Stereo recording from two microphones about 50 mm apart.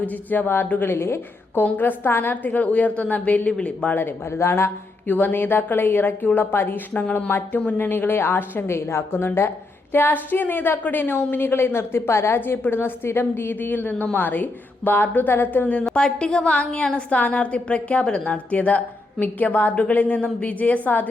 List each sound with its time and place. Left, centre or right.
0.0 s a woman's voice: left
1.6 s a woman's voice: left
4.3 s speech: left
5.0 s a woman's voice: left
7.5 s a woman's voice: left
7.8 s a woman's voice: left
8.6 s a woman's voice: left
15.6 s a woman's voice: left
15.9 s a woman's voice: centre; by 21.1 s left